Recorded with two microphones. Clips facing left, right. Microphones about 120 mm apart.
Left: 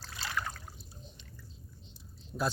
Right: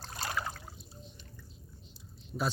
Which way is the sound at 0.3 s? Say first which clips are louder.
Left 2 dB; 10° right (ahead or behind).